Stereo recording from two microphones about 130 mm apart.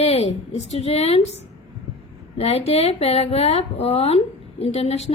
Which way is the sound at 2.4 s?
55° left (ahead or behind).